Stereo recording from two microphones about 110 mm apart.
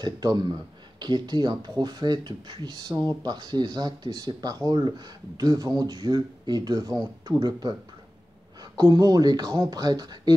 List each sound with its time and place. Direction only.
0.0 s speech: 40° right (ahead or behind)
8.7 s speech: 40° right (ahead or behind)